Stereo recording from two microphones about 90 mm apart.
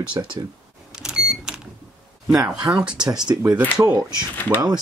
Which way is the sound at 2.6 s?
55° right (ahead or behind).